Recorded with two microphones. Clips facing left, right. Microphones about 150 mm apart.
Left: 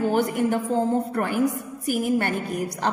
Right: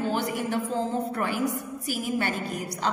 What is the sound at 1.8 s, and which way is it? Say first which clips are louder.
Speech: left 6 dB; 55° left (ahead or behind).